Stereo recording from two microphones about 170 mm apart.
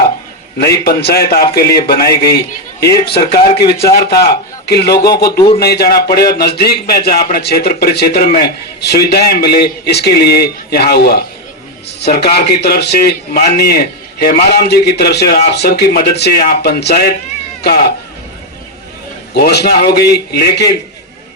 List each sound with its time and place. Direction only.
0.6 s a man's voice: 70° left (ahead or behind)
19.3 s a man's voice: 75° left (ahead or behind)